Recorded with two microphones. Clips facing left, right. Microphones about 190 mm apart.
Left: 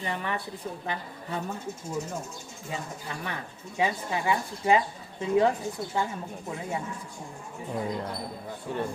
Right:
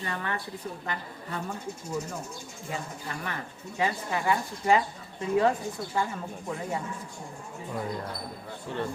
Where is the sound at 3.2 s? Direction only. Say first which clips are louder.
Even; 15° left (ahead or behind).